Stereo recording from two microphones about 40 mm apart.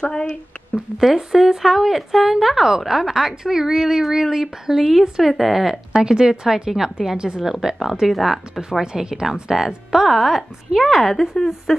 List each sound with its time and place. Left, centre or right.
0.0 s speech: left
0.9 s a woman's voice: centre
8.5 s a woman's voice: centre
10.0 s a woman's voice: centre